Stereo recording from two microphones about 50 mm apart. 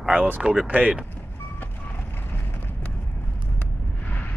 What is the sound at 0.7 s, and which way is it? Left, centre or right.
Speech, right.